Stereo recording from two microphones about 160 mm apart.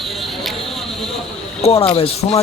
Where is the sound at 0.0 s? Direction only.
Centre (ahead or behind).